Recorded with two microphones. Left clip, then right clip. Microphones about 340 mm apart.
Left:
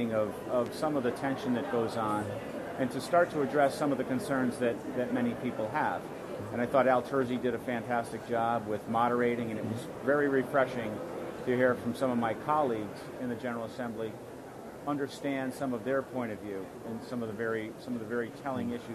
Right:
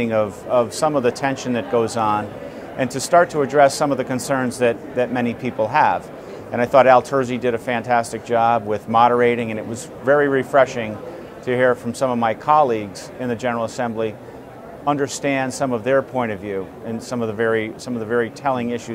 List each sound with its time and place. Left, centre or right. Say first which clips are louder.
0.0 s speech: right 11 dB; right